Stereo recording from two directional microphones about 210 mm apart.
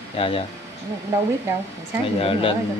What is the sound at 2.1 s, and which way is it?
Speech, 25° left (ahead or behind).